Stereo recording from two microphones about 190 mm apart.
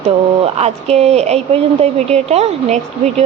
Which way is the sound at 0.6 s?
35° right (ahead or behind).